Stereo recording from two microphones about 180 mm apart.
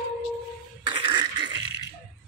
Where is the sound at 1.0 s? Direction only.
25° right (ahead or behind).